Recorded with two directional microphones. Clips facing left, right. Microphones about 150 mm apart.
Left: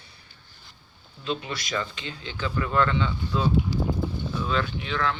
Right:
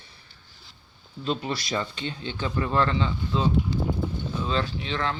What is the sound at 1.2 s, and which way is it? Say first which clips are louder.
Speech: right 2 dB; 35° right (ahead or behind).